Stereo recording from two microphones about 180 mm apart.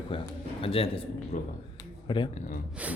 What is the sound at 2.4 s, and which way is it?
Speech, 50° left (ahead or behind).